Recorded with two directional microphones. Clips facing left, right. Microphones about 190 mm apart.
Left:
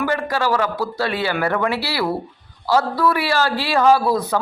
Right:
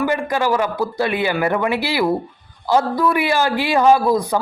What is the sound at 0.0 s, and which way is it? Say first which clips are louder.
A man's voice: right 2 dB; 15° right (ahead or behind).